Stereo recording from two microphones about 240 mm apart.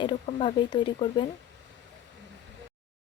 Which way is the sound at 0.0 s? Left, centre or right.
Left.